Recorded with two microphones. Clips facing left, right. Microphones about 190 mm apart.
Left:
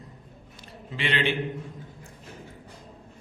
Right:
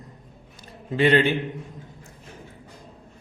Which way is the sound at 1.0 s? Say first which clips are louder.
Right 9 dB; 45° right (ahead or behind).